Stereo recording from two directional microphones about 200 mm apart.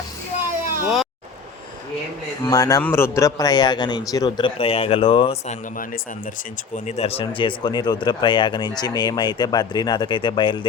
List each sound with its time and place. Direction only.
0.8 s speech: centre (ahead or behind)
2.4 s a man's voice: 15° left (ahead or behind)
6.7 s a man's voice: 35° left (ahead or behind)